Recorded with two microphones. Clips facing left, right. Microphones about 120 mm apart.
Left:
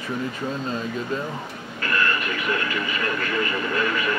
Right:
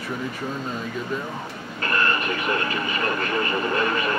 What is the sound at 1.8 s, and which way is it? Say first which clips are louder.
Speech: right 1 dB; 35° right (ahead or behind).